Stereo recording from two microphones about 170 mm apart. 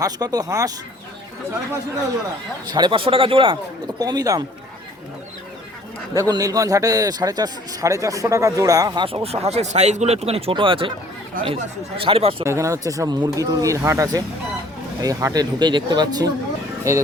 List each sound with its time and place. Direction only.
0.0 s a man's voice: 20° right (ahead or behind)
2.6 s a man's voice: 25° right (ahead or behind)
6.1 s a man's voice: 20° right (ahead or behind)
9.0 s speech: 35° right (ahead or behind)
11.9 s speech: 35° right (ahead or behind)
12.5 s a man's voice: 15° right (ahead or behind)